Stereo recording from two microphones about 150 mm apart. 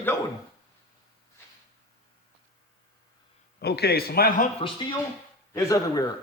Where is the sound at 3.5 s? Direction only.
90° left.